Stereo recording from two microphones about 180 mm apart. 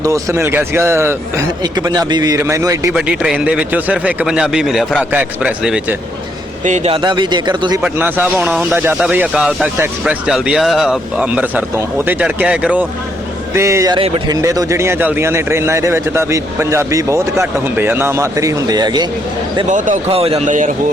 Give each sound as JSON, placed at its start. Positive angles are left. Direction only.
{"t": 0.0, "sound": "a man's voice", "side_deg": -15}
{"t": 2.9, "sound": "a man's voice", "side_deg": -5}
{"t": 6.7, "sound": "speech", "side_deg": -40}
{"t": 7.8, "sound": "a man's voice", "side_deg": -10}
{"t": 19.6, "sound": "speech", "side_deg": -45}
{"t": 20.1, "sound": "speech", "side_deg": -35}